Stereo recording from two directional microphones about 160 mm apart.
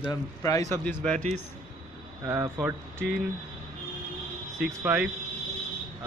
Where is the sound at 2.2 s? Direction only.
15° right (ahead or behind).